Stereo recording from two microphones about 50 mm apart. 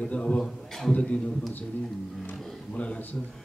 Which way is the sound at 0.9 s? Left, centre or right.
Left.